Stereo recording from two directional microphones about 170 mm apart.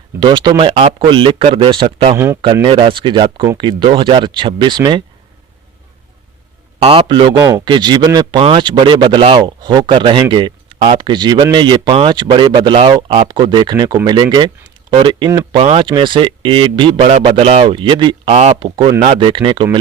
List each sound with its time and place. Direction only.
0.2 s a man's voice: 25° right (ahead or behind)
2.1 s speech: 15° right (ahead or behind)
2.6 s a man's voice: 30° right (ahead or behind)
6.8 s a man's voice: 30° right (ahead or behind)
17.1 s a man's voice: 40° right (ahead or behind)